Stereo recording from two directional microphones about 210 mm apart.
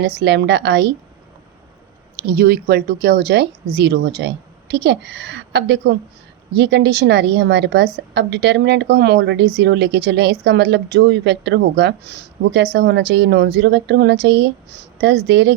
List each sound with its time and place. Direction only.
0.0 s a woman's voice: 50° right (ahead or behind)
2.2 s a woman's voice: 45° right (ahead or behind)